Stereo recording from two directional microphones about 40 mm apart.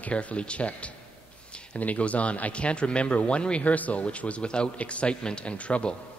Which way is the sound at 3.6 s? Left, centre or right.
Left.